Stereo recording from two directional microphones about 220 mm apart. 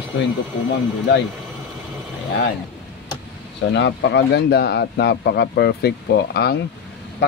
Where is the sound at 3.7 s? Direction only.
55° left (ahead or behind).